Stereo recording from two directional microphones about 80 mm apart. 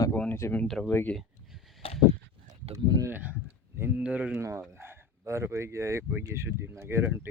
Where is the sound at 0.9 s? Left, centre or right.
Left.